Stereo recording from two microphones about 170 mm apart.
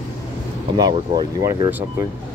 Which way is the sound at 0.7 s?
25° right (ahead or behind).